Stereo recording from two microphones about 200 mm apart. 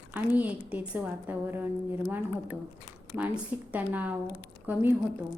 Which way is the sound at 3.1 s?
10° right (ahead or behind).